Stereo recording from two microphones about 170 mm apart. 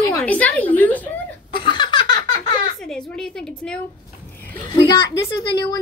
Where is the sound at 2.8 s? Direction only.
5° left (ahead or behind).